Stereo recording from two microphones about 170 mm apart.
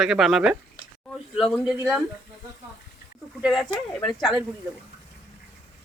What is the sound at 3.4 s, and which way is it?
Speech, centre (ahead or behind).